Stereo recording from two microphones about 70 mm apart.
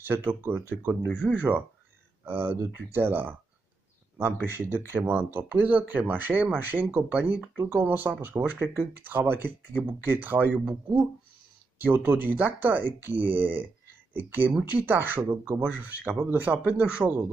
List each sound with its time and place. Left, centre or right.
0.0 s speech: right
2.2 s speech: right
4.5 s speech: right
11.8 s speech: right